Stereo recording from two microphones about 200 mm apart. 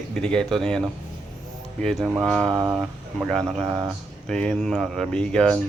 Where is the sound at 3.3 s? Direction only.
Centre (ahead or behind).